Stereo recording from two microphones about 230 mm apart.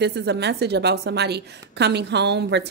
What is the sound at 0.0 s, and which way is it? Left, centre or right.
A woman's voice, right.